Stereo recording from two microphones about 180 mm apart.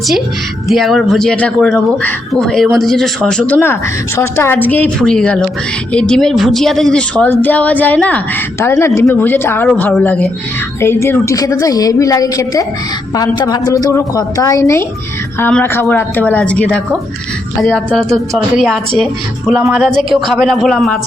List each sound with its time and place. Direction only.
0.7 s a woman's voice: centre (ahead or behind)